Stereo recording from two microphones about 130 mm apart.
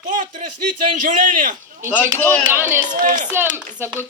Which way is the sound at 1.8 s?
10° right (ahead or behind).